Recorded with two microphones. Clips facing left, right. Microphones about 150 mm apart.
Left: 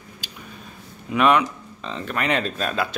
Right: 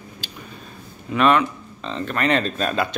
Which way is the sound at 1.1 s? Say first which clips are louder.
Right 1 dB; 15° left (ahead or behind).